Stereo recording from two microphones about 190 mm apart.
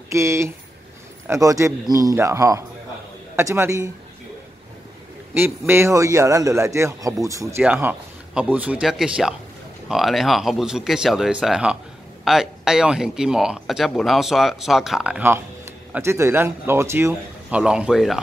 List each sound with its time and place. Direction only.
0.1 s a man's voice: 15° right (ahead or behind)
5.3 s a man's voice: 10° right (ahead or behind)